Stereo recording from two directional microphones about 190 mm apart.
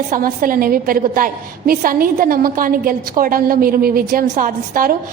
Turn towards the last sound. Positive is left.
turn(degrees=-45)  # may be behind; listen again after turning